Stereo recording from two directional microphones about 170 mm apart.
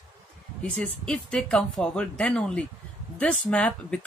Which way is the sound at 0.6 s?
5° left (ahead or behind).